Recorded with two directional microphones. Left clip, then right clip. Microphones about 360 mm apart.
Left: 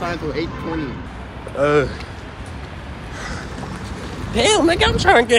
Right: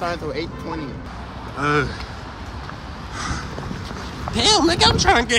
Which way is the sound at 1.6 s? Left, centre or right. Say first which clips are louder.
Left 4 dB; centre.